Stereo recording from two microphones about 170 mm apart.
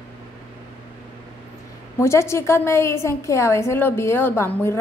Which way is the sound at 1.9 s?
15° left (ahead or behind).